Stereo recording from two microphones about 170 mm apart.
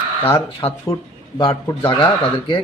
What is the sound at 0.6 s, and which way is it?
Speech, 35° left (ahead or behind).